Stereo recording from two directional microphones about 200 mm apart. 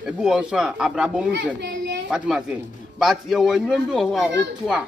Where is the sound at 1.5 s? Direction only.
60° right (ahead or behind).